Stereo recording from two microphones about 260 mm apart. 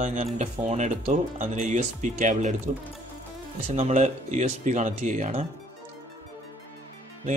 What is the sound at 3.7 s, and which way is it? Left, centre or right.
Speech, right.